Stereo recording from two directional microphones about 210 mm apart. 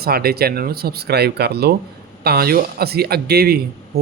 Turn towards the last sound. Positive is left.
turn(degrees=-45)  # may be behind; listen again after turning